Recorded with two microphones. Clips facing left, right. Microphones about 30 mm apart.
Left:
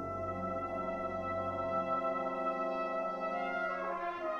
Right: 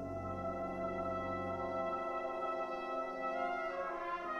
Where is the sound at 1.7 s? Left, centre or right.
Centre.